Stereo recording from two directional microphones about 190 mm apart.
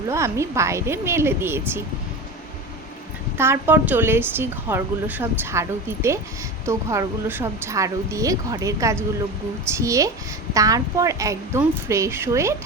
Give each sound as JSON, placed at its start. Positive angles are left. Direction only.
{"t": 0.1, "sound": "a woman's voice", "side_deg": -15}
{"t": 3.3, "sound": "a woman's voice", "side_deg": -10}